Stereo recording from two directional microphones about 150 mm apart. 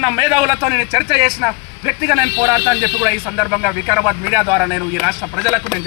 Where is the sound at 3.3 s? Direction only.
10° right (ahead or behind).